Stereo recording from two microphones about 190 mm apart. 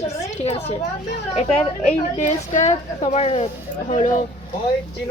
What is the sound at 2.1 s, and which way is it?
Speech, 35° left (ahead or behind).